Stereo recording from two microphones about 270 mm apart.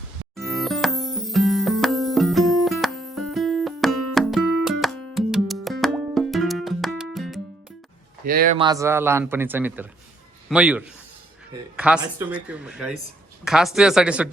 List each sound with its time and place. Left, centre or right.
0.3 s music: centre
8.2 s speech: right
8.5 s speech: centre